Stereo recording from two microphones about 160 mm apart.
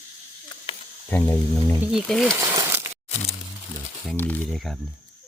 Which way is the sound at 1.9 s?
Centre (ahead or behind).